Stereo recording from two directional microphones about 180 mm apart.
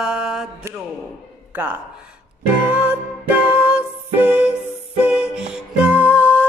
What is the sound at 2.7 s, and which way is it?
Music, 5° right (ahead or behind).